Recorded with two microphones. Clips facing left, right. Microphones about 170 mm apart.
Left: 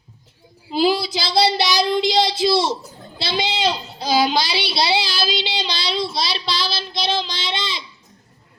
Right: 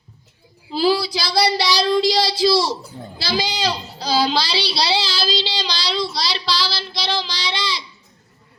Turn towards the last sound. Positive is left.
turn(degrees=20)  # may be behind; listen again after turning